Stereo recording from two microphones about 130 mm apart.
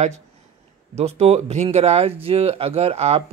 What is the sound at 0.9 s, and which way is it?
Speech, 55° right (ahead or behind).